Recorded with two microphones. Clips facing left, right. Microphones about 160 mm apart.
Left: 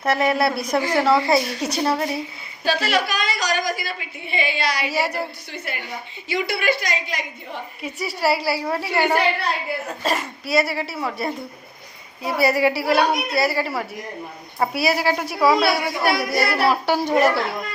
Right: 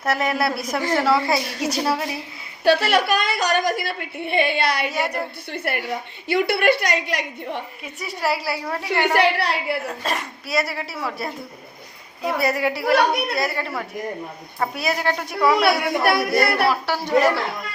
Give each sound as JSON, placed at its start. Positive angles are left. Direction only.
{"t": 0.0, "sound": "a woman's voice", "side_deg": 0}
{"t": 2.6, "sound": "a woman's voice", "side_deg": -60}
{"t": 4.9, "sound": "a woman's voice", "side_deg": 5}
{"t": 5.5, "sound": "a woman's voice", "side_deg": -60}
{"t": 7.8, "sound": "a woman's voice", "side_deg": 0}
{"t": 9.1, "sound": "a woman's voice", "side_deg": -75}
{"t": 10.0, "sound": "a woman's voice", "side_deg": 0}
{"t": 15.9, "sound": "a woman's voice", "side_deg": -60}
{"t": 16.6, "sound": "speech", "side_deg": 20}